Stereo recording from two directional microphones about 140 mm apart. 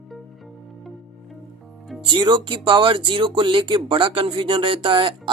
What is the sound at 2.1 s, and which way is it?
Speech, 35° right (ahead or behind).